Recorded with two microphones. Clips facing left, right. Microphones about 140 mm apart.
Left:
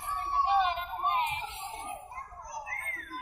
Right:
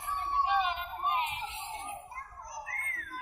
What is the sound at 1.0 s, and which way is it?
Music, 35° left (ahead or behind).